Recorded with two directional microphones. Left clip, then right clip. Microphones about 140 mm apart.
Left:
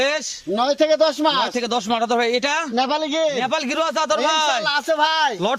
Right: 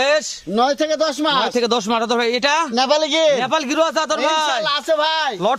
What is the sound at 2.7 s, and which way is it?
Speech, 80° right.